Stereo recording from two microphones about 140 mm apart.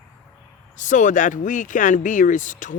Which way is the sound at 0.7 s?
65° left (ahead or behind).